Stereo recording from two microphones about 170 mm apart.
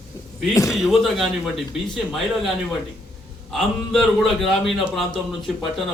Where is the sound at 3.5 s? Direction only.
Centre (ahead or behind).